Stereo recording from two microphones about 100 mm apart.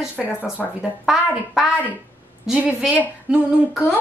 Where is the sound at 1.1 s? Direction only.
10° right (ahead or behind).